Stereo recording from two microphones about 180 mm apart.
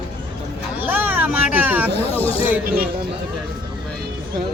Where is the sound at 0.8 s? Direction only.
10° right (ahead or behind).